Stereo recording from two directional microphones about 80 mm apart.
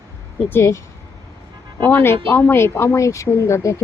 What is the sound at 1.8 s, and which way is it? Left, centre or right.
Speech, left.